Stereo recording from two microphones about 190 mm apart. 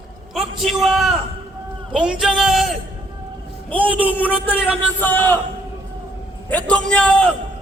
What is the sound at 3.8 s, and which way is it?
Speech, 10° right (ahead or behind).